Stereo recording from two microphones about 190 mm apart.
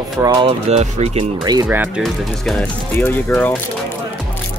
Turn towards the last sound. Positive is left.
turn(degrees=5)  # may be behind; listen again after turning